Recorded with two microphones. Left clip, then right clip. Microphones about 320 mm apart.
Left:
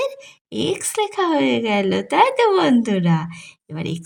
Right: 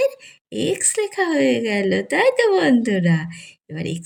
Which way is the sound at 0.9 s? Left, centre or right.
Centre.